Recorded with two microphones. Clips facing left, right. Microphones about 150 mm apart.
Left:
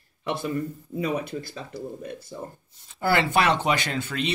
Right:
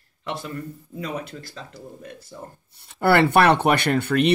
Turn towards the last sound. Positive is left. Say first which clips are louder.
# right 9 dB
turn(degrees=-65)  # may be behind; listen again after turning